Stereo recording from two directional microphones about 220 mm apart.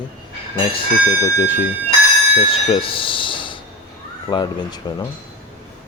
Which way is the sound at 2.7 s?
25° left (ahead or behind).